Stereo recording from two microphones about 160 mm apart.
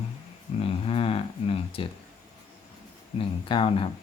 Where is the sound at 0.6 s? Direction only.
35° left (ahead or behind).